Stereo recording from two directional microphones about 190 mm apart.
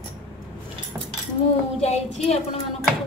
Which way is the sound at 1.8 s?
35° left (ahead or behind).